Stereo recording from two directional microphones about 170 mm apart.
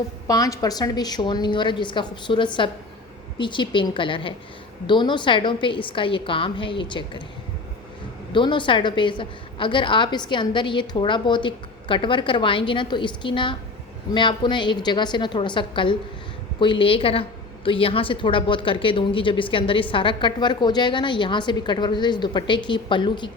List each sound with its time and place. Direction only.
0.3 s a woman's voice: 20° left (ahead or behind)
8.3 s a woman's voice: 30° left (ahead or behind)